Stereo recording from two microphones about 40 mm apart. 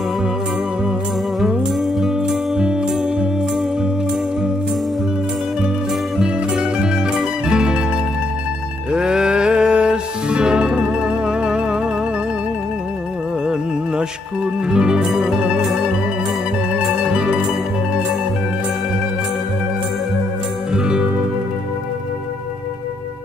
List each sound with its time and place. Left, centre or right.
1.8 s music: centre
2.2 s music: centre
6.2 s zither: right
7.4 s music: centre
8.9 s music: centre
13.5 s music: right
15.0 s music: centre
20.7 s music: right